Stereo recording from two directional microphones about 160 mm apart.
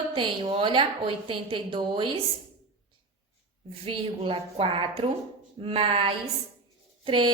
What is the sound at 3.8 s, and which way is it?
A woman's voice, 35° right (ahead or behind).